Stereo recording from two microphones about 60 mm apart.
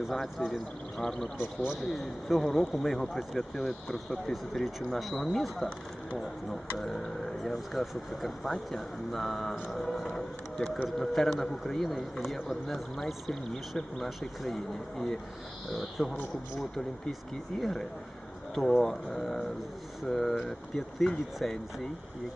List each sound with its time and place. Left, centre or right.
0.1 s speech: centre
1.4 s a man's voice: centre
1.8 s speech: centre